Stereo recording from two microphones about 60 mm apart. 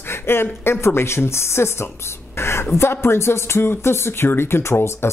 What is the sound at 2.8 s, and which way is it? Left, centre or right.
Speech, left.